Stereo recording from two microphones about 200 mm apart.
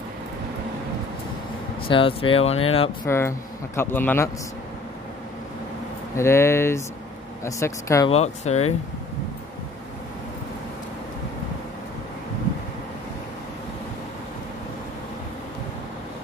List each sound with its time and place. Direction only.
1.9 s speech: 25° left (ahead or behind)
3.1 s speech: 10° left (ahead or behind)
6.1 s speech: 15° left (ahead or behind)
8.1 s speech: 30° left (ahead or behind)